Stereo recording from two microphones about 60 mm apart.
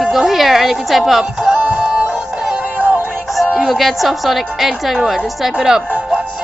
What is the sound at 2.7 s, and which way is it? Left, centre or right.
Synthetic singing, right.